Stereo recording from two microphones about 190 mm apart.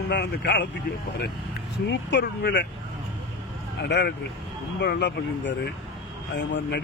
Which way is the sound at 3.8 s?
60° left (ahead or behind).